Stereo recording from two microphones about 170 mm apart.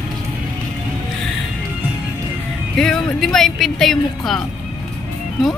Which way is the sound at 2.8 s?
5° left (ahead or behind).